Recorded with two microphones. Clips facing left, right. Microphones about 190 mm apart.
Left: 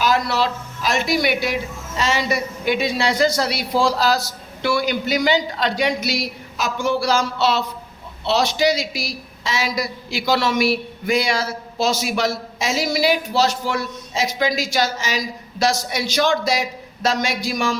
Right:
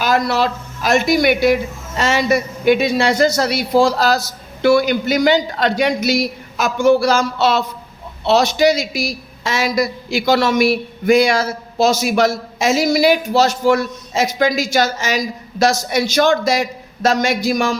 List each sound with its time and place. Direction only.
0.0 s a man's voice: 50° right (ahead or behind)